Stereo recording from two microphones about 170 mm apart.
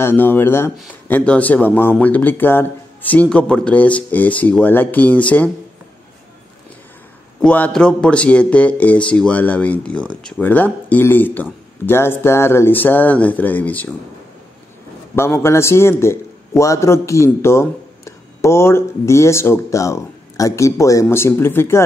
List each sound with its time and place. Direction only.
0.0 s a man's voice: 10° left (ahead or behind)
7.4 s a man's voice: 10° left (ahead or behind)
15.1 s a man's voice: 15° left (ahead or behind)